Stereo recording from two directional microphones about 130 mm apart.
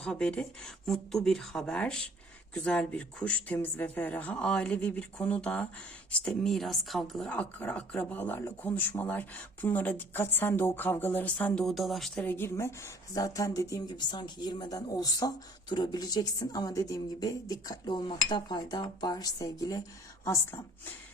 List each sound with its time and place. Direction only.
0.0 s speech: 5° left (ahead or behind)
12.2 s a woman's voice: 15° left (ahead or behind)